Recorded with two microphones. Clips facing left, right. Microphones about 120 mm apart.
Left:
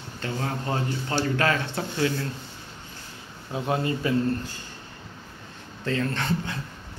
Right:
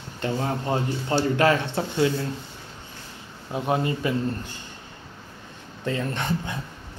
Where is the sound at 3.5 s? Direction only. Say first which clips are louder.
Right 2 dB; 15° right (ahead or behind).